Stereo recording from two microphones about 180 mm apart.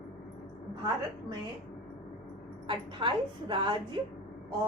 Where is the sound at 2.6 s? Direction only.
25° right (ahead or behind).